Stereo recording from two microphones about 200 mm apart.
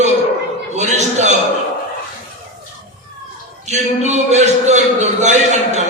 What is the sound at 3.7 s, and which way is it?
A man's voice, 35° right (ahead or behind).